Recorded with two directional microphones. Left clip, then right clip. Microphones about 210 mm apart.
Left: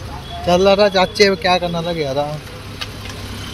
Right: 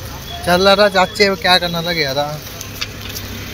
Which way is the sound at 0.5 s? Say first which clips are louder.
Right 1 dB; 15° left (ahead or behind).